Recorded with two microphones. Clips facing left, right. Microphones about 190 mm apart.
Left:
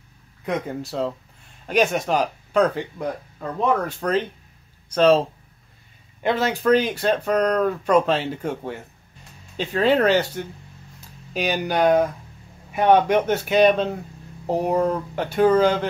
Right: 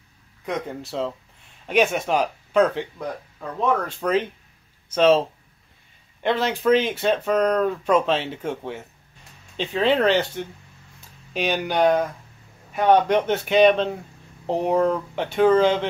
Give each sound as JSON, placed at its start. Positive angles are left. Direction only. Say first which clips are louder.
{"t": 0.5, "sound": "speech", "louder": "left 2 dB", "side_deg": 0}
{"t": 6.4, "sound": "speech", "louder": "left 1 dB", "side_deg": 0}